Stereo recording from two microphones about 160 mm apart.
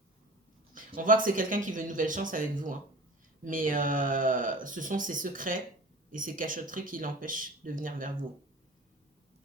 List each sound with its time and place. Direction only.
0.9 s speech: 60° right (ahead or behind)